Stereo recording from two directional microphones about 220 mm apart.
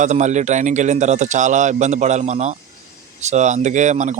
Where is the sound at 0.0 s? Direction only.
35° right (ahead or behind).